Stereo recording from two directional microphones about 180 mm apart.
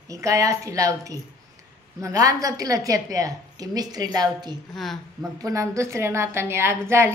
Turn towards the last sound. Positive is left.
turn(degrees=-15)  # may be behind; listen again after turning